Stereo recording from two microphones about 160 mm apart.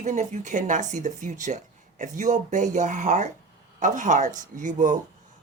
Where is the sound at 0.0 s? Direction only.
50° right (ahead or behind).